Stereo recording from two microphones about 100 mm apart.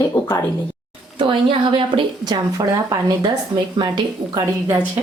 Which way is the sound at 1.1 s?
60° right (ahead or behind).